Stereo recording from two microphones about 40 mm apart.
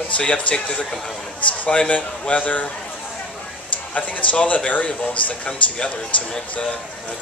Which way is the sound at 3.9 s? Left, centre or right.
Left.